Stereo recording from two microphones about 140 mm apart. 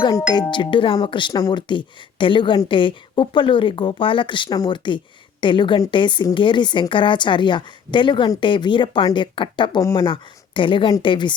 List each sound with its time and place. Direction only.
0.5 s a woman's voice: 35° left (ahead or behind)